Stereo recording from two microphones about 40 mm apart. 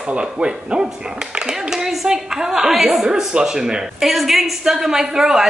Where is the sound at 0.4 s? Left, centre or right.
Right.